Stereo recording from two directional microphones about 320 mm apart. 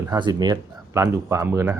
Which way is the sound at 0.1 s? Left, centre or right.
Centre.